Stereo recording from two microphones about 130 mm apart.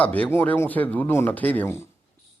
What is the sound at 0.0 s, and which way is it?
Speech, 10° left (ahead or behind).